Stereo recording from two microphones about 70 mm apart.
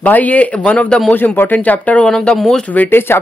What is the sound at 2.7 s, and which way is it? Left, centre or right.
Speech, left.